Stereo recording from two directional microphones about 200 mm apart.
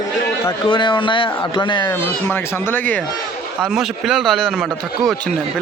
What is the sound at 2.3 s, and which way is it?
Speech, 10° left (ahead or behind).